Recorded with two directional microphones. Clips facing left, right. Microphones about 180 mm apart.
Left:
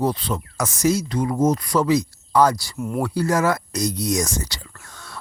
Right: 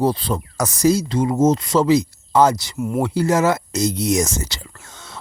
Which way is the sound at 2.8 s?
5° right (ahead or behind).